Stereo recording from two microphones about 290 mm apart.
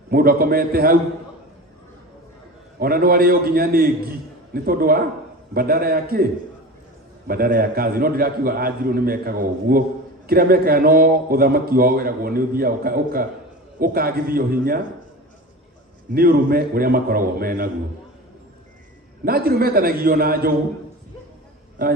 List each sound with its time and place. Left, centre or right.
0.1 s a man's voice: right
2.7 s a man's voice: right
7.3 s a man's voice: right
16.1 s a man's voice: right
19.2 s a man's voice: right